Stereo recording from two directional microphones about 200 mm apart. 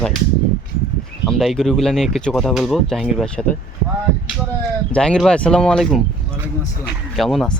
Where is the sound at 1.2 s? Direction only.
Centre (ahead or behind).